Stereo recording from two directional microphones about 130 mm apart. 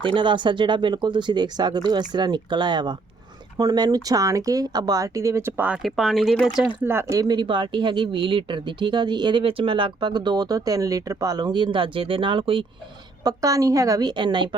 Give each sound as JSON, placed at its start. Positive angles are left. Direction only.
{"t": 0.1, "sound": "speech", "side_deg": -40}
{"t": 5.8, "sound": "speech", "side_deg": 0}
{"t": 6.8, "sound": "speech", "side_deg": -20}
{"t": 13.2, "sound": "speech", "side_deg": -25}